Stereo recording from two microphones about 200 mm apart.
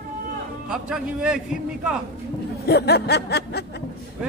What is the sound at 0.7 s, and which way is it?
A man's voice, 5° right (ahead or behind).